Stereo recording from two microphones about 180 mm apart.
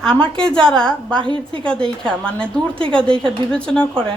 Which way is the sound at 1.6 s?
5° left (ahead or behind).